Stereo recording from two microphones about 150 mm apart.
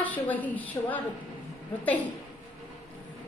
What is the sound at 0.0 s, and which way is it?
A woman's voice, 10° left (ahead or behind).